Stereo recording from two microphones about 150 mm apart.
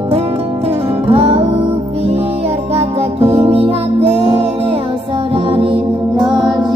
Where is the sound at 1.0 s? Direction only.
40° right (ahead or behind).